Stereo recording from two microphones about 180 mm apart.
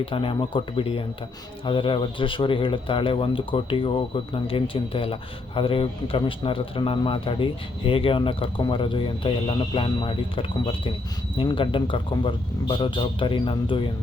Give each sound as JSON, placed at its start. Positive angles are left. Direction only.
{"t": 0.0, "sound": "speech", "side_deg": 30}